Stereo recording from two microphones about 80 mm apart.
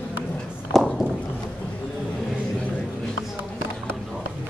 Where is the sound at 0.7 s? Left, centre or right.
Centre.